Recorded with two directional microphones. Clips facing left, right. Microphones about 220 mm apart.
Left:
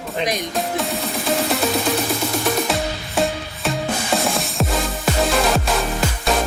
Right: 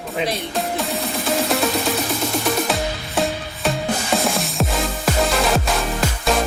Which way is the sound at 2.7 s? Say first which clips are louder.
Even; centre (ahead or behind).